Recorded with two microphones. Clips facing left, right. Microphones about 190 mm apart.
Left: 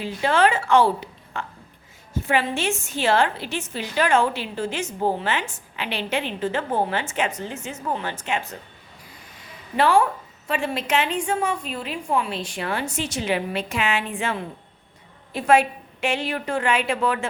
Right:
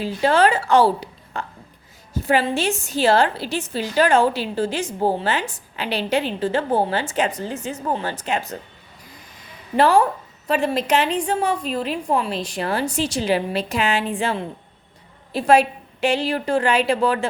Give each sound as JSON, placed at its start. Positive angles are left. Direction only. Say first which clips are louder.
{"t": 0.0, "sound": "a woman's voice", "louder": "right 3 dB", "side_deg": -35}
{"t": 9.7, "sound": "a woman's voice", "louder": "right 3 dB", "side_deg": -40}